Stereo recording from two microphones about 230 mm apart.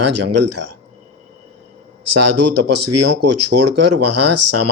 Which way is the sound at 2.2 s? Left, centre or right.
Right.